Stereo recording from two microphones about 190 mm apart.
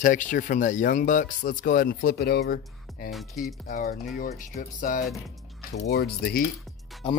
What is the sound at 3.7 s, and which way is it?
Speech, 50° left (ahead or behind).